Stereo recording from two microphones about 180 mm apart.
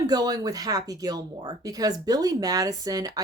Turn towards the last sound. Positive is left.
turn(degrees=-20)  # may be behind; listen again after turning